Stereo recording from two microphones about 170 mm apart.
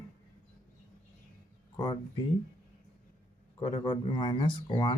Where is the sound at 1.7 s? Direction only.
25° left (ahead or behind).